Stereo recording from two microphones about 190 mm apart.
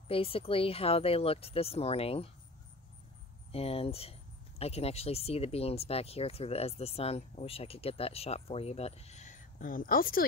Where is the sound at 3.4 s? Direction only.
30° left (ahead or behind).